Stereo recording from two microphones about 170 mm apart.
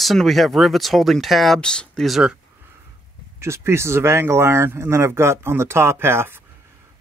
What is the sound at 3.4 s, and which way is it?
Speech, 15° right (ahead or behind).